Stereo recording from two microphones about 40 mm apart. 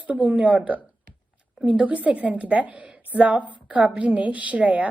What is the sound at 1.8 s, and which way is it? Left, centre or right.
A woman's voice, right.